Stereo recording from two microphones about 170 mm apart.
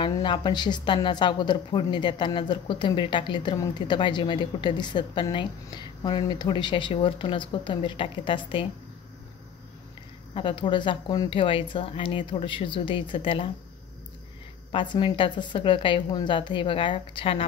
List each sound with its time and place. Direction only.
0.0 s a woman's voice: 30° left (ahead or behind)
10.3 s a woman's voice: 30° left (ahead or behind)
14.7 s a woman's voice: 30° left (ahead or behind)